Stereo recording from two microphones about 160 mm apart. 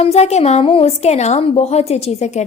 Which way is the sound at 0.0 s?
40° left (ahead or behind).